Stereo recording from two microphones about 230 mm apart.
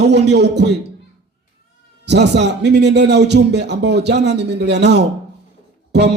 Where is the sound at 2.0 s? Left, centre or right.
Right.